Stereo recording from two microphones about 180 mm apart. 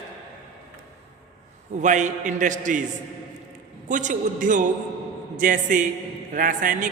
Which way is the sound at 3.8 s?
45° right (ahead or behind).